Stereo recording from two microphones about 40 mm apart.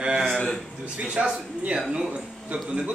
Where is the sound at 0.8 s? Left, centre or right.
Right.